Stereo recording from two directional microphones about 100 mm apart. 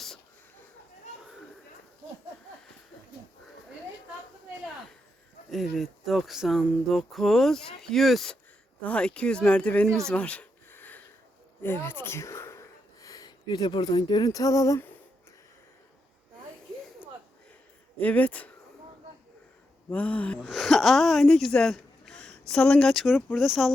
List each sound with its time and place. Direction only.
5.5 s speech: centre (ahead or behind)
8.8 s speech: 10° left (ahead or behind)
10.1 s a sound: 15° left (ahead or behind)
11.6 s speech: 20° left (ahead or behind)
18.0 s speech: 15° left (ahead or behind)
19.9 s speech: 15° left (ahead or behind)
20.5 s speech: centre (ahead or behind)